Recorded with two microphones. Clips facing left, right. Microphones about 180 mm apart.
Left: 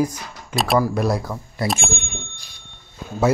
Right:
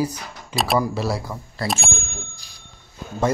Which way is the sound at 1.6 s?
20° left (ahead or behind).